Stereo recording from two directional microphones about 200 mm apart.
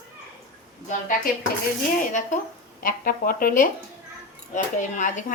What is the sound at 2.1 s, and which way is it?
A woman's voice, 40° left (ahead or behind).